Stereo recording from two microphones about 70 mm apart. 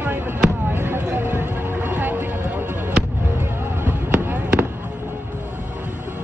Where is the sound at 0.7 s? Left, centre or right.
Right.